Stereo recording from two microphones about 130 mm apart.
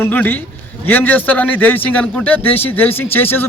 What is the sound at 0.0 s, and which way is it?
A man's voice, 15° left (ahead or behind).